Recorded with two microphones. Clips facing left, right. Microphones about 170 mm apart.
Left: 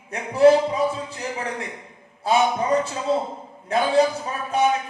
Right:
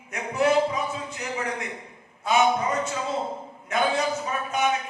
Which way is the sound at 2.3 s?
30° left (ahead or behind).